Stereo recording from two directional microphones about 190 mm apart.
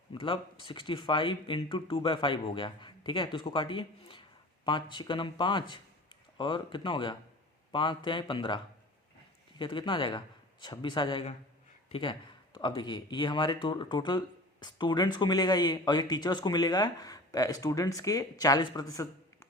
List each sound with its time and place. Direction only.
0.1 s speech: 25° left (ahead or behind)